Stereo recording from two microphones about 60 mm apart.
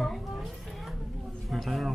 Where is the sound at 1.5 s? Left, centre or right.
Centre.